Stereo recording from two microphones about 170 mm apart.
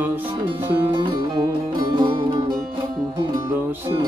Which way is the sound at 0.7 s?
30° right (ahead or behind).